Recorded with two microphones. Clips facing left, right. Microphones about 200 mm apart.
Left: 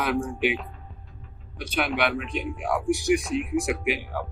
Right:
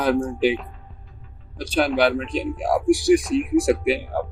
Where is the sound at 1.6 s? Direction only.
30° right (ahead or behind).